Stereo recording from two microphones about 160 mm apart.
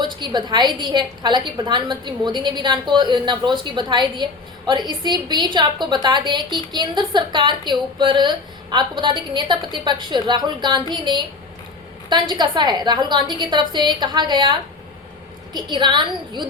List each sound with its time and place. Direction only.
0.0 s a woman's voice: 30° right (ahead or behind)